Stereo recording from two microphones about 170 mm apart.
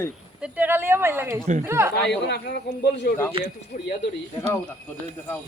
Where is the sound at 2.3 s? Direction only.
70° left (ahead or behind).